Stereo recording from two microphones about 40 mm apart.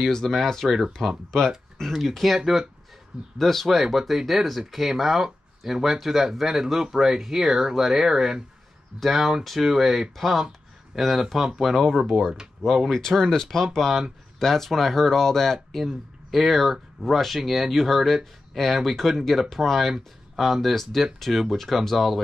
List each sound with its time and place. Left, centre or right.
0.1 s speech: centre
1.9 s speech: centre
12.9 s speech: centre
13.7 s speech: centre